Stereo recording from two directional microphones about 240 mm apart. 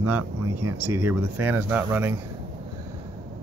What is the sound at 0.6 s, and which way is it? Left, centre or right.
Speech, centre.